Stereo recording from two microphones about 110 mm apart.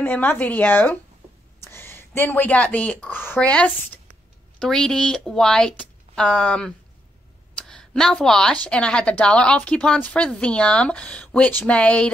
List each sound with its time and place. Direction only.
0.0 s a woman's voice: 15° left (ahead or behind)